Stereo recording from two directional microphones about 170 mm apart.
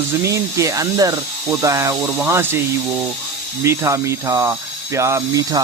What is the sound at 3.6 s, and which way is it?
Speech, 15° right (ahead or behind).